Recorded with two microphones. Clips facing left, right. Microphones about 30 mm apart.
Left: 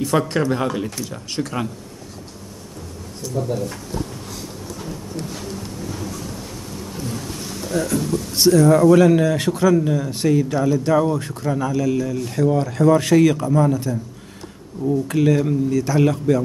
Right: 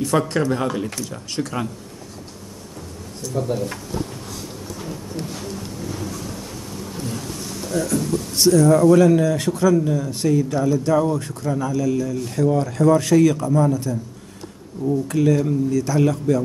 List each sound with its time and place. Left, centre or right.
0.0 s speech: centre
3.3 s speech: centre
7.7 s speech: centre
12.4 s speech: centre
12.9 s speech: left
15.0 s speech: left